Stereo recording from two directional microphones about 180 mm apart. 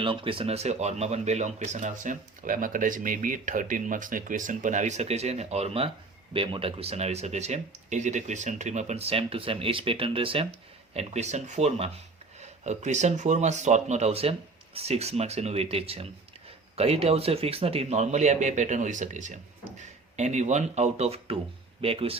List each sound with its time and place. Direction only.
0.0 s speech: 30° right (ahead or behind)